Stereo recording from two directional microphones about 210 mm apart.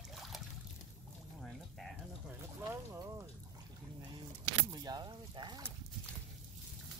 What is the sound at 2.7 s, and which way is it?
Boat, 15° right (ahead or behind).